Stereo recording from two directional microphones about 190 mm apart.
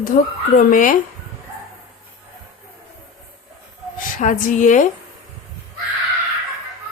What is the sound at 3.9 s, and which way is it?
Speech, 45° left (ahead or behind).